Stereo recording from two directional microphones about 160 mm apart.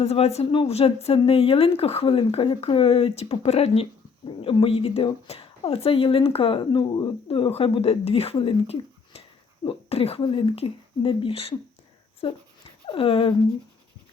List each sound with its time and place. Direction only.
0.0 s a woman's voice: 40° left (ahead or behind)